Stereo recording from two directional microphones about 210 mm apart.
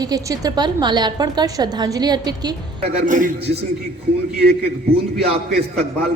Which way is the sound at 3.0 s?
40° right (ahead or behind).